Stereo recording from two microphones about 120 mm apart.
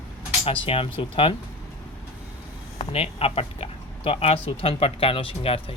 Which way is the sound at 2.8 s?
55° left (ahead or behind).